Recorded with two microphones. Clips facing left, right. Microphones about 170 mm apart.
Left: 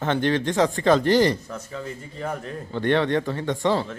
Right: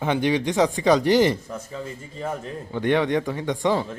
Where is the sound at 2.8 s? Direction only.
15° right (ahead or behind).